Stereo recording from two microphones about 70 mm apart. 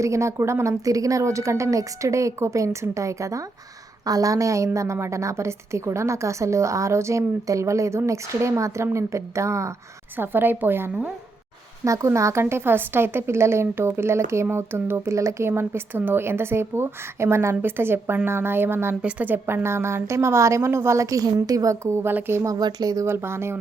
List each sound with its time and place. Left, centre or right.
0.0 s a woman's voice: right
4.0 s a woman's voice: right
10.2 s a woman's voice: right
11.9 s a woman's voice: right
15.1 s a woman's voice: right
15.4 s a woman's voice: right
22.4 s speech: right
23.0 s a woman's voice: right